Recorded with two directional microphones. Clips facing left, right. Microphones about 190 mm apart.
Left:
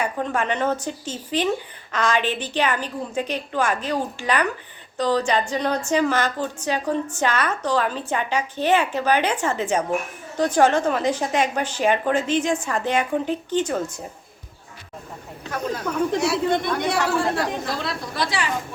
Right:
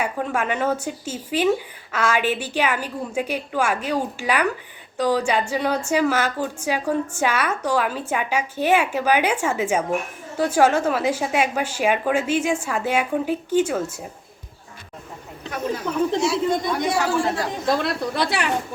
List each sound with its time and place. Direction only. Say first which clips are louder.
0.0 s a woman's voice: even; 5° right (ahead or behind)
16.2 s speech: even; 65° left (ahead or behind)
17.7 s a woman's voice: right 6 dB; 60° right (ahead or behind)